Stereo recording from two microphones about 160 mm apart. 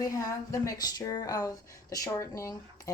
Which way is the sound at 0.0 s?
20° left (ahead or behind).